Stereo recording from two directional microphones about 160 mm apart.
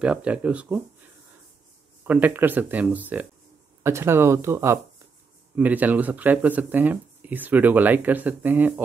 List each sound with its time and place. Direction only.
0.0 s speech: 5° right (ahead or behind)
2.0 s speech: 10° right (ahead or behind)